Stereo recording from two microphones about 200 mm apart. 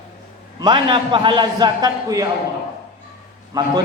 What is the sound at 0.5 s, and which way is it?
A man's voice, 20° right (ahead or behind).